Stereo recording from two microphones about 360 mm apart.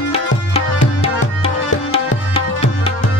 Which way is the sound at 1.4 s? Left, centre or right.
Centre.